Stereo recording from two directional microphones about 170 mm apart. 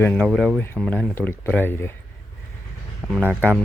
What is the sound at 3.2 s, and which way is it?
Speech, 10° right (ahead or behind).